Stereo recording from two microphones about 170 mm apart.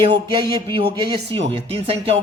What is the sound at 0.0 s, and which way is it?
A man's voice, 25° right (ahead or behind).